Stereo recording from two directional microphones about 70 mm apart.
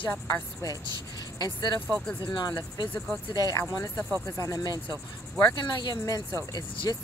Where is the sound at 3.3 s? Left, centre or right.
Left.